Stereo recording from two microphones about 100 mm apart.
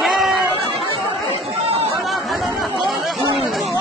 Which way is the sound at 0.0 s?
Centre (ahead or behind).